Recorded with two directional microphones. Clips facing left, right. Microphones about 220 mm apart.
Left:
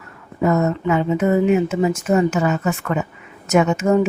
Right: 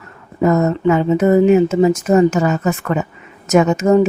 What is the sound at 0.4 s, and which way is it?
A woman's voice, 40° right (ahead or behind).